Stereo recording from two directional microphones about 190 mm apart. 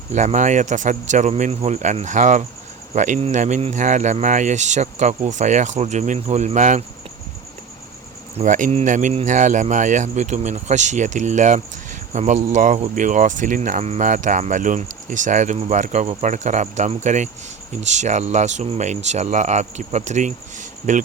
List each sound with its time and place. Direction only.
0.1 s speech: 35° right (ahead or behind)
8.4 s speech: 40° right (ahead or behind)